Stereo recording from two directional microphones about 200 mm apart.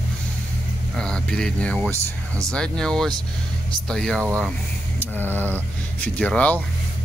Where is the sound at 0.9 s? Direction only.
5° left (ahead or behind).